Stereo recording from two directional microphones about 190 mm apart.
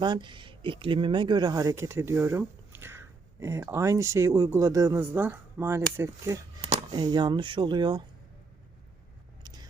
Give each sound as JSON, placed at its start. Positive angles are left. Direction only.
{"t": 0.0, "sound": "speech", "side_deg": -25}
{"t": 9.4, "sound": "vehicle", "side_deg": -20}